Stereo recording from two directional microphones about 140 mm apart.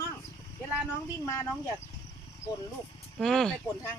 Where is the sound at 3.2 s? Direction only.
5° left (ahead or behind).